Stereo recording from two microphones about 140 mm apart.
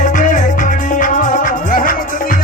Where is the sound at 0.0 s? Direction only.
65° left (ahead or behind).